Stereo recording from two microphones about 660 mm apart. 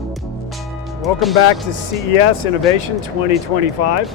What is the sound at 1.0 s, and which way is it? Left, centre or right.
Speech, centre.